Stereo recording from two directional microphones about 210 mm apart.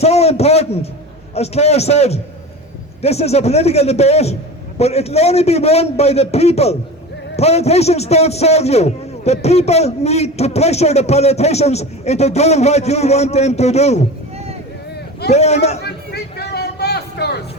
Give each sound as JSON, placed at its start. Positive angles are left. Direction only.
{"t": 0.0, "sound": "a man's voice", "side_deg": 30}
{"t": 15.3, "sound": "a man's voice", "side_deg": 30}
{"t": 15.8, "sound": "a sound", "side_deg": 50}